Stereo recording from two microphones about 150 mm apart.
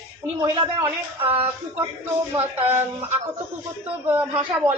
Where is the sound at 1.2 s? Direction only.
40° right (ahead or behind).